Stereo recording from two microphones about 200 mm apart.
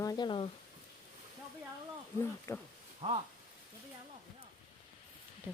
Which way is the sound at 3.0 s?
30° right (ahead or behind).